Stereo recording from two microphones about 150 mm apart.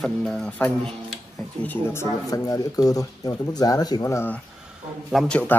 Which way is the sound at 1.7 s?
15° left (ahead or behind).